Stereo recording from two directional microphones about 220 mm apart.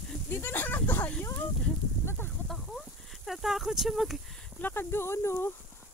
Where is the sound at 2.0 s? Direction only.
10° left (ahead or behind).